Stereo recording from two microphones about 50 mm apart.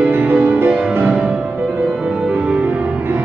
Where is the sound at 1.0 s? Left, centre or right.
Right.